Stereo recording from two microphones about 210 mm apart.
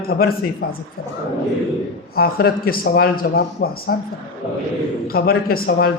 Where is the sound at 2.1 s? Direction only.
45° left (ahead or behind).